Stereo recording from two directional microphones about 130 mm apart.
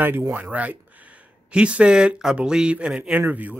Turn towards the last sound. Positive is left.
turn(degrees=-10)  # may be behind; listen again after turning